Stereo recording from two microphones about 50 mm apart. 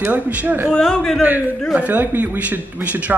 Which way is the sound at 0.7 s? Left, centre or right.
Centre.